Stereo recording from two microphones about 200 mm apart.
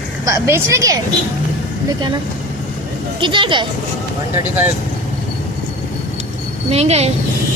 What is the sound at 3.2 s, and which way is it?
Speech, 25° right (ahead or behind).